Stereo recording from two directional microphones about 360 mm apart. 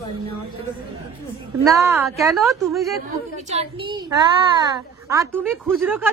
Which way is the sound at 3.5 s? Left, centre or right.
Centre.